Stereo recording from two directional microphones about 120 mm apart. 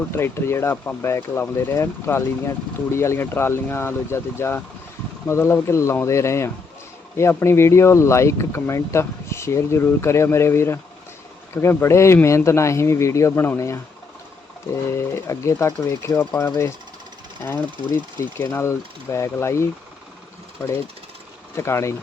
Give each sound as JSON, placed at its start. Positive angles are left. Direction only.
{"t": 0.1, "sound": "speech", "side_deg": 20}
{"t": 14.8, "sound": "speech", "side_deg": 20}
{"t": 17.4, "sound": "speech", "side_deg": 15}
{"t": 21.5, "sound": "speech", "side_deg": 20}